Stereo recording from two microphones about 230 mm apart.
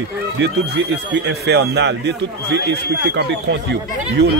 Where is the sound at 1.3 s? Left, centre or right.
Right.